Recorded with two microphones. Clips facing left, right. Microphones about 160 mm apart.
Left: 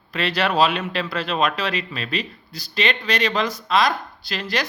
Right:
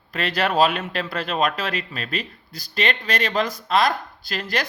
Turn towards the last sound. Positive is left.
turn(degrees=-50)  # may be behind; listen again after turning